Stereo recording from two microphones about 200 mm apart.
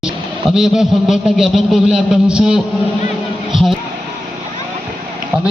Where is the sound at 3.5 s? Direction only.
Centre (ahead or behind).